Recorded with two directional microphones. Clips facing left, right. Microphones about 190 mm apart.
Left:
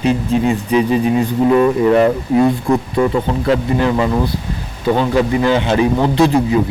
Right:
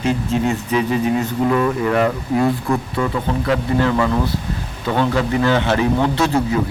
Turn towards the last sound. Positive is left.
turn(degrees=15)  # may be behind; listen again after turning